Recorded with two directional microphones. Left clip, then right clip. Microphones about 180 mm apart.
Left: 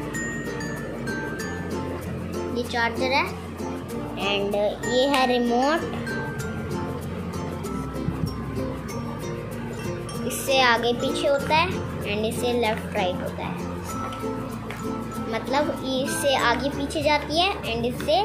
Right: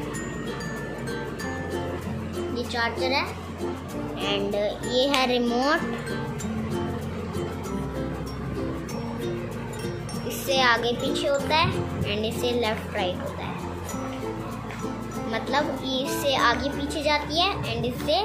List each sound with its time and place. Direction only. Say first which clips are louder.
2.5 s a child's voice: left 2 dB; 15° left (ahead or behind)
10.5 s a child's voice: left 2 dB; 10° left (ahead or behind)
15.3 s a child's voice: left 1 dB; 10° left (ahead or behind)